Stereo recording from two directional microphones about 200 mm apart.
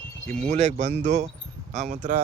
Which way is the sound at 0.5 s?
35° right (ahead or behind).